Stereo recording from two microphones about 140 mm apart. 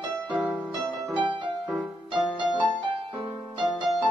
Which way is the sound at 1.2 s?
35° right (ahead or behind).